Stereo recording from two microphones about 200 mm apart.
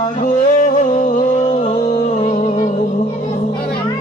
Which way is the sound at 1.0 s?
40° left (ahead or behind).